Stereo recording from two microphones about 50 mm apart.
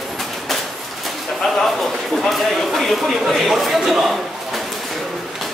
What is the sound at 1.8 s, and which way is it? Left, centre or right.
Speech, centre.